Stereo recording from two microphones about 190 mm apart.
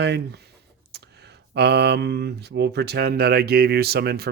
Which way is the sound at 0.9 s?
60° right (ahead or behind).